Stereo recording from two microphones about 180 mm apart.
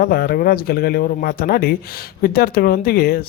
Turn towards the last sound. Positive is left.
turn(degrees=60)  # may be behind; listen again after turning